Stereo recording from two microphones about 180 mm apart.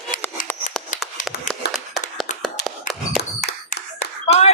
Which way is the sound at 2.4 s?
Centre (ahead or behind).